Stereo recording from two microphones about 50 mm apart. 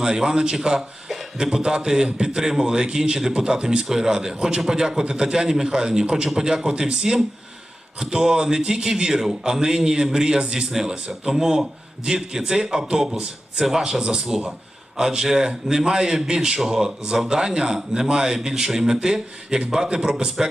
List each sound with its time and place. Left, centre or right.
0.0 s a man's voice: centre